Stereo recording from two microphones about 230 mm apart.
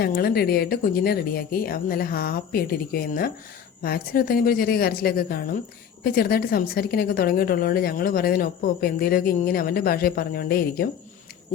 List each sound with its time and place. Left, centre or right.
0.0 s a woman's voice: left